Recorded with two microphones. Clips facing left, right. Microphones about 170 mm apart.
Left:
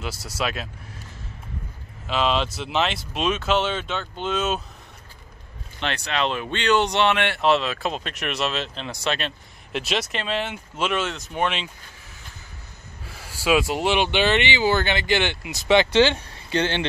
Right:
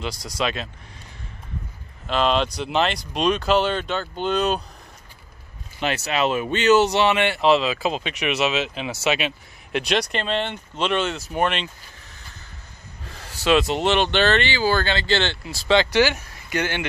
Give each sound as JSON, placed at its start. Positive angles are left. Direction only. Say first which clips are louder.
{"t": 0.0, "sound": "speech", "louder": "right 2 dB", "side_deg": 5}
{"t": 2.0, "sound": "speech", "louder": "right 2 dB", "side_deg": 0}
{"t": 5.8, "sound": "speech", "louder": "right 3 dB", "side_deg": -5}
{"t": 13.0, "sound": "speech", "louder": "right 2 dB", "side_deg": 5}